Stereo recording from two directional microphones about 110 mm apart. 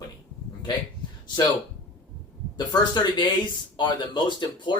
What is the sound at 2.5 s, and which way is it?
Speech, 40° left (ahead or behind).